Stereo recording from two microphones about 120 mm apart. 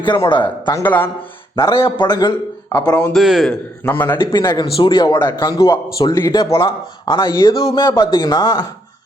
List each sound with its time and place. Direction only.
0.0 s speech: 40° left (ahead or behind)
0.9 s a man's voice: 15° left (ahead or behind)
1.5 s speech: 35° left (ahead or behind)
3.1 s a man's voice: centre (ahead or behind)
3.8 s a man's voice: 15° left (ahead or behind)
4.2 s speech: 40° left (ahead or behind); by 6.7 s 25° left (ahead or behind)
7.0 s speech: 40° left (ahead or behind)